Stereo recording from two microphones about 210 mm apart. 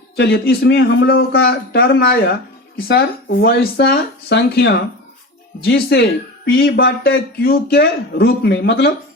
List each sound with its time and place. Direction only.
0.2 s speech: 50° left (ahead or behind)